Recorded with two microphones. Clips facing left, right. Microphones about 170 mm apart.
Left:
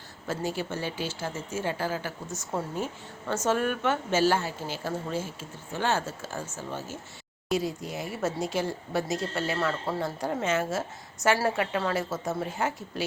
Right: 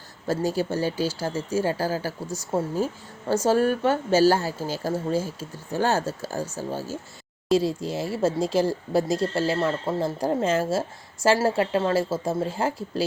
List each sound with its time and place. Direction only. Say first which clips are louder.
0.3 s speech: right 6 dB; 40° right (ahead or behind)